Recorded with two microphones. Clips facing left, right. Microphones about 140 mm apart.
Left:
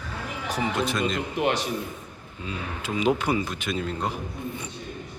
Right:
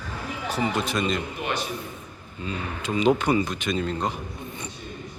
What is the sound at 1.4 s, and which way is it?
Speech, 90° left.